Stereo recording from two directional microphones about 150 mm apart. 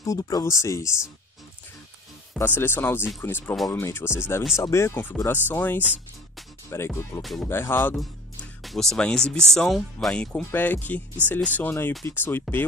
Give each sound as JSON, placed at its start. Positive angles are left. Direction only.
{"t": 0.0, "sound": "speech", "side_deg": 20}
{"t": 2.3, "sound": "speech", "side_deg": 15}
{"t": 7.2, "sound": "speech", "side_deg": 0}
{"t": 7.4, "sound": "speech", "side_deg": 15}
{"t": 8.6, "sound": "speech", "side_deg": 5}